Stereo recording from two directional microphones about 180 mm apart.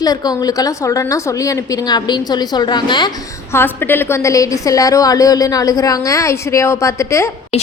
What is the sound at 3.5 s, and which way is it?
A woman's voice, 10° left (ahead or behind).